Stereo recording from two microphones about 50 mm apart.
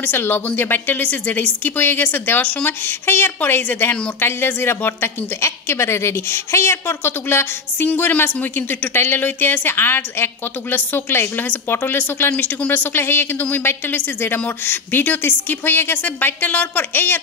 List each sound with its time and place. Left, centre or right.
0.0 s a woman's voice: left
5.4 s a woman's voice: left